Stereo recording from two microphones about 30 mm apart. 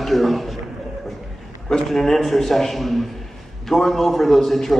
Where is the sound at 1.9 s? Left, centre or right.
Centre.